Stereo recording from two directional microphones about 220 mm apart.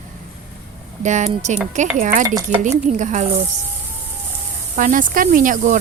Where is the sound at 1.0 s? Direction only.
35° right (ahead or behind).